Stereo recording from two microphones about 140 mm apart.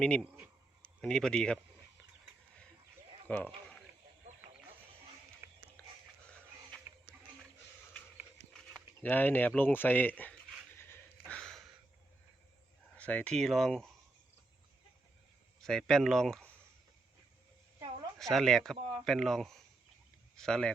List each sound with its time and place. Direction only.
0.0 s speech: 5° left (ahead or behind)
3.2 s speech: 10° left (ahead or behind)
5.4 s a sound: 20° right (ahead or behind)
5.8 s a sound: 10° left (ahead or behind)
9.0 s speech: 15° left (ahead or behind)
10.8 s a sound: 15° left (ahead or behind)
13.0 s speech: 10° left (ahead or behind)
15.6 s speech: centre (ahead or behind)
18.2 s speech: centre (ahead or behind)